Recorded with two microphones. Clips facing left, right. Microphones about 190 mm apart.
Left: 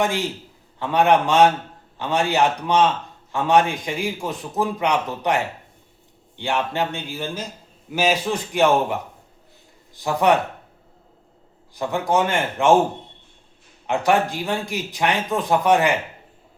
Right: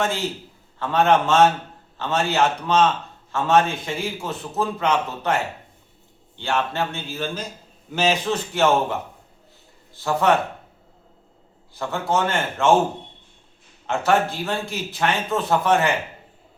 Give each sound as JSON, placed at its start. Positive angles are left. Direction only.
{"t": 0.0, "sound": "speech", "side_deg": 15}
{"t": 11.7, "sound": "speech", "side_deg": 15}
{"t": 13.8, "sound": "speech", "side_deg": 15}